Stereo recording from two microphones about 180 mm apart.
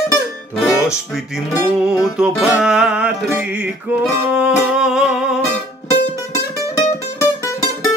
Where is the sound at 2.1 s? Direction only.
5° right (ahead or behind).